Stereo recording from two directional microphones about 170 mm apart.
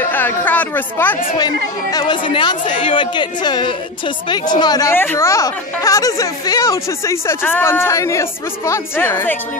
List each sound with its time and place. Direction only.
0.1 s speech: 10° left (ahead or behind)
1.4 s speech: 25° left (ahead or behind)